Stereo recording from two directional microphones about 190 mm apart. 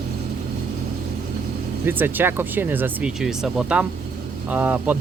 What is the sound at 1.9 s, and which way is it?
Speech, 10° right (ahead or behind).